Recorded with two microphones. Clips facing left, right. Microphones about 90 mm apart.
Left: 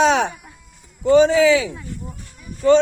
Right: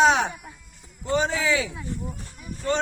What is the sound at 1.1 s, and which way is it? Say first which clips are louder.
Speech: left 10 dB; 90° left.